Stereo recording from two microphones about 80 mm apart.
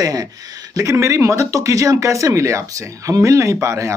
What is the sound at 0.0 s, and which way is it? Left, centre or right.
Speech, right.